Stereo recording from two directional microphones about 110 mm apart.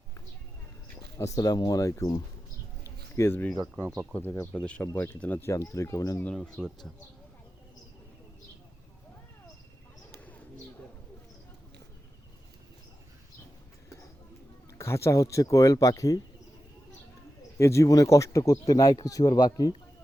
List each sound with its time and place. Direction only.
1.2 s speech: 30° left (ahead or behind)
3.2 s speech: 20° left (ahead or behind)
5.4 s speech: 25° left (ahead or behind)
6.2 s speech: 10° left (ahead or behind)
10.2 s bird: 15° left (ahead or behind)
14.8 s speech: 25° left (ahead or behind)
17.6 s speech: 25° left (ahead or behind)